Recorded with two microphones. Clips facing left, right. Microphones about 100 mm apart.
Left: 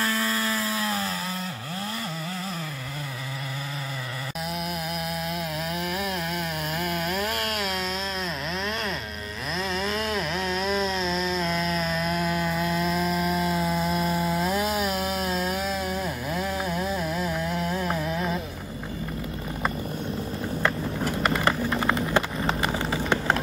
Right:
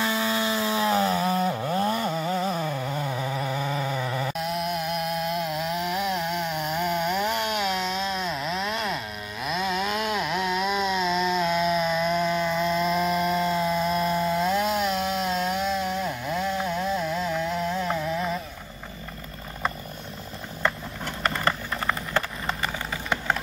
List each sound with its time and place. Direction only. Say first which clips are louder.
0.0 s chainsaw: right 1 dB; 15° right (ahead or behind); by 2.7 s 30° right (ahead or behind)
3.5 s a sound: right 7 dB; 30° right (ahead or behind)
4.4 s chainsaw: right 3 dB; centre (ahead or behind)
20.6 s vehicle: left 1 dB; 5° left (ahead or behind)
21.5 s vehicle: left 3 dB; 20° left (ahead or behind)